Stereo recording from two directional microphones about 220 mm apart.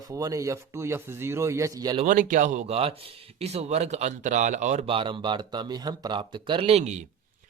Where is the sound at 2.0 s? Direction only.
35° right (ahead or behind).